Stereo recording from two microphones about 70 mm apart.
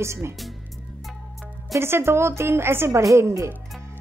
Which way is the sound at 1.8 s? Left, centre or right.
Right.